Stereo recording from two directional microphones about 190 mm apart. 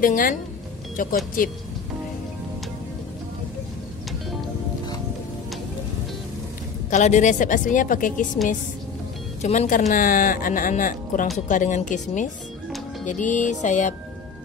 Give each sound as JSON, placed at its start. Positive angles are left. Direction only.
{"t": 0.0, "sound": "speech", "side_deg": 45}
{"t": 6.9, "sound": "speech", "side_deg": 40}
{"t": 9.4, "sound": "speech", "side_deg": 40}